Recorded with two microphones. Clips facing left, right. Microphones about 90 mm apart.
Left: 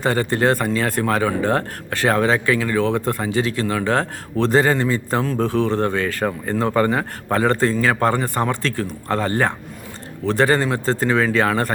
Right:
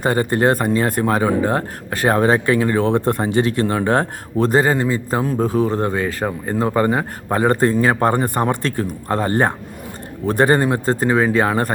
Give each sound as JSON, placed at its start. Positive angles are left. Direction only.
{"t": 0.0, "sound": "a man's voice", "side_deg": -20}
{"t": 2.8, "sound": "a man's voice", "side_deg": -20}